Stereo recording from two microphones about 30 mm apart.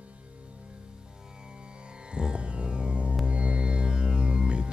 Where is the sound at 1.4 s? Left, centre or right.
Right.